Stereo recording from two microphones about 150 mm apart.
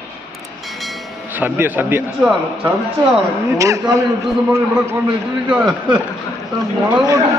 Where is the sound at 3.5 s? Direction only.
20° right (ahead or behind).